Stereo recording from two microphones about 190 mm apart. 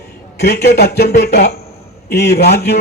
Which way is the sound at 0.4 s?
60° left (ahead or behind).